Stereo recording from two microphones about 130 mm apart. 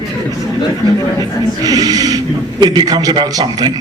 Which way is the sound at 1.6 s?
30° right (ahead or behind).